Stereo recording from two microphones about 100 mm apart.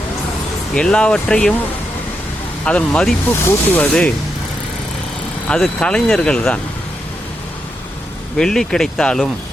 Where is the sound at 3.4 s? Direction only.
25° left (ahead or behind).